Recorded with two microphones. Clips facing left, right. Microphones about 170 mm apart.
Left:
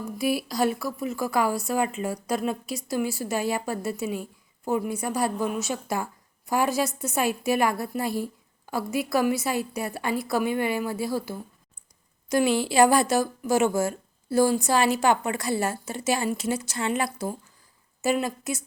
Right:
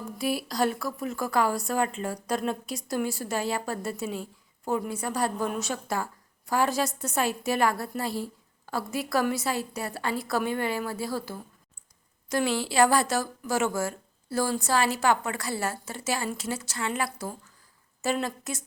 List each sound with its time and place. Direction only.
0.2 s speech: 10° left (ahead or behind)